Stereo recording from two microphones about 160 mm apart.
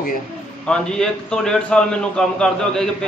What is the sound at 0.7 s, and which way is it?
A man's voice, 5° left (ahead or behind).